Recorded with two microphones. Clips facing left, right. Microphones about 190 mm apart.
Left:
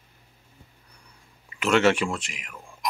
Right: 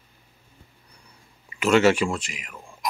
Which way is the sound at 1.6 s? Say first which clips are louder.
Right 2 dB; centre (ahead or behind).